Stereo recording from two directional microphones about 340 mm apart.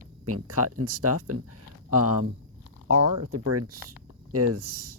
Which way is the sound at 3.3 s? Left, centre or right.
Right.